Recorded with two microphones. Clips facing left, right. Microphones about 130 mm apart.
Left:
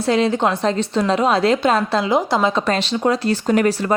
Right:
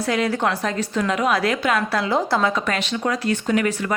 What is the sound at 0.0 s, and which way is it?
A woman's voice, 25° left (ahead or behind).